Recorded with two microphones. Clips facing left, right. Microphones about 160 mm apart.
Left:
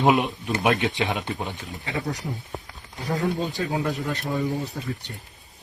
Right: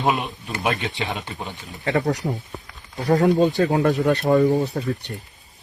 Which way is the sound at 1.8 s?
75° right (ahead or behind).